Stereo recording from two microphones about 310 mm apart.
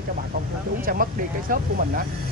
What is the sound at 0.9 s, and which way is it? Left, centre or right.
Speech, right.